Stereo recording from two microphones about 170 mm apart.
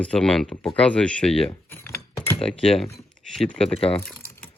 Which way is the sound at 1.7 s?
15° left (ahead or behind).